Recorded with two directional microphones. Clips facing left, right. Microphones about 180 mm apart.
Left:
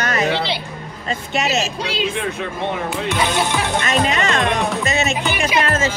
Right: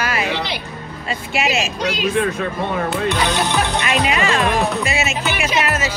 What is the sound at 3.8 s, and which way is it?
Music, 40° left (ahead or behind).